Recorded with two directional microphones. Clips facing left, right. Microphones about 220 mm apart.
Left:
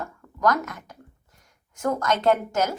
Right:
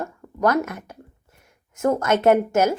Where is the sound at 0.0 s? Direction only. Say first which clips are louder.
Right 2 dB; 25° right (ahead or behind).